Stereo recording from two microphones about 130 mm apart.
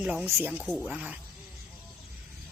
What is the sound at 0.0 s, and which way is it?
Speech, 5° right (ahead or behind).